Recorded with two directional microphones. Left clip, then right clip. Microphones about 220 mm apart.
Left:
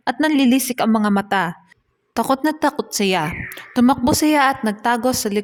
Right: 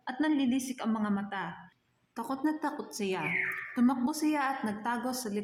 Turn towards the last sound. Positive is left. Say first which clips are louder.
# left 15 dB
turn(degrees=45)  # may be behind; listen again after turning